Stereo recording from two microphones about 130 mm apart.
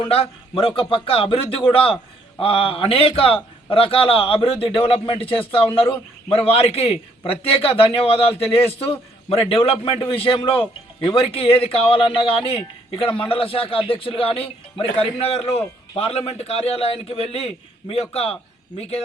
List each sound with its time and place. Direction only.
0.0 s a man's voice: 45° left (ahead or behind)